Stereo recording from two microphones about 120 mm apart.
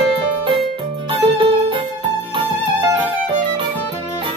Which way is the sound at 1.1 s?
45° right (ahead or behind).